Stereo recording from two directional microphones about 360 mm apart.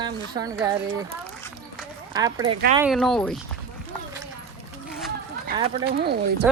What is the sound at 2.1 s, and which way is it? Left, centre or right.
Speech, centre.